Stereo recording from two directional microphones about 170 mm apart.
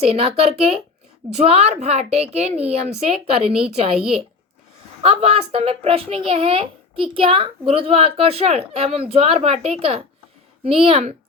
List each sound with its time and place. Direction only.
0.0 s a child's voice: 35° right (ahead or behind)
5.0 s a child's voice: 35° right (ahead or behind)